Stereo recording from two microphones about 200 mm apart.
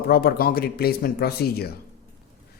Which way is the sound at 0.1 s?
50° left (ahead or behind).